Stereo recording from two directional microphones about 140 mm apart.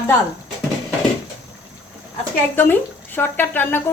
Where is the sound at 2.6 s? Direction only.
15° left (ahead or behind).